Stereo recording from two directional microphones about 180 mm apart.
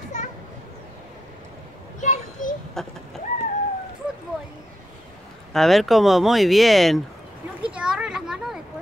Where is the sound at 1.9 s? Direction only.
45° left (ahead or behind).